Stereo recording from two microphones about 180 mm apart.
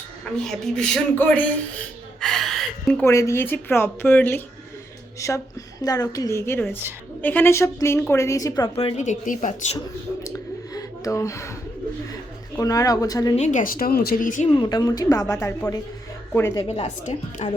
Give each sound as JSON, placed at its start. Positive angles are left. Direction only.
{"t": 0.3, "sound": "speech", "side_deg": 5}
{"t": 2.2, "sound": "gasp", "side_deg": 0}
{"t": 3.0, "sound": "a woman's voice", "side_deg": 15}
{"t": 8.7, "sound": "speech", "side_deg": 35}
{"t": 10.8, "sound": "speech", "side_deg": 20}
{"t": 12.5, "sound": "a woman's voice", "side_deg": 20}
{"t": 13.3, "sound": "speech", "side_deg": 40}
{"t": 14.6, "sound": "a woman's voice", "side_deg": 20}
{"t": 16.6, "sound": "speech", "side_deg": 35}